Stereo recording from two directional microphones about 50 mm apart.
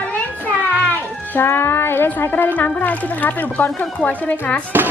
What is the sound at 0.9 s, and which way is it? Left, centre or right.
Speech, left.